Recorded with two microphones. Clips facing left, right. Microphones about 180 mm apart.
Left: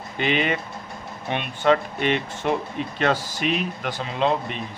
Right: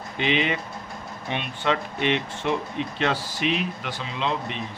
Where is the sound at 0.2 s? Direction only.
50° left (ahead or behind).